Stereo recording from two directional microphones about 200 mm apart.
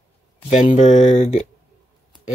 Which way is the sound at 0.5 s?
35° left (ahead or behind).